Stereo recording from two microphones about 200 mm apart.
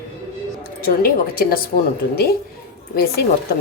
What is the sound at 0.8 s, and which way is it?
Speech, 45° left (ahead or behind).